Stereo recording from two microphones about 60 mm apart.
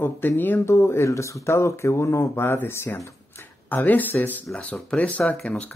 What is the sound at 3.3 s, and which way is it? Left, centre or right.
Speech, left.